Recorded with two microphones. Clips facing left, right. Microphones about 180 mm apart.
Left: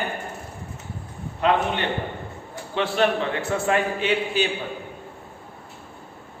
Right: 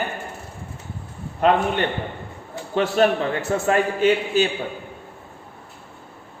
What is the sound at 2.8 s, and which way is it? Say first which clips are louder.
A man's voice: right 3 dB; 45° right (ahead or behind).